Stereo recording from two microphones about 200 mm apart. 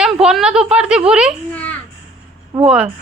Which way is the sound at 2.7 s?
5° right (ahead or behind).